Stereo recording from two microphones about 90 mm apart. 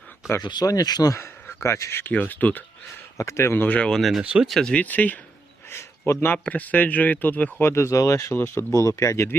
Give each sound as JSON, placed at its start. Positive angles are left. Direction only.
{"t": 0.4, "sound": "speech", "side_deg": 50}
{"t": 1.1, "sound": "speech", "side_deg": 30}
{"t": 3.2, "sound": "speech", "side_deg": 35}
{"t": 4.2, "sound": "speech", "side_deg": -10}
{"t": 4.4, "sound": "speech", "side_deg": 0}
{"t": 4.7, "sound": "speech", "side_deg": 15}
{"t": 7.6, "sound": "speech", "side_deg": 30}